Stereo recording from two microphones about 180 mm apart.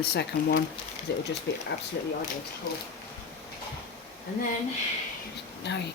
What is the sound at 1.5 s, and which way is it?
Speech, 80° left.